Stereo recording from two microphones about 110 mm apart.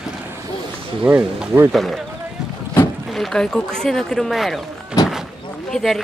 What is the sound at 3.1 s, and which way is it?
Speech, 5° left (ahead or behind).